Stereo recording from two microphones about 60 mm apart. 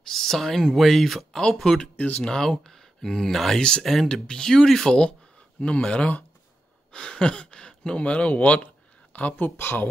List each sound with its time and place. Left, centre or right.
0.0 s speech: centre
2.0 s speech: left
2.2 s speech: centre; by 9.8 s left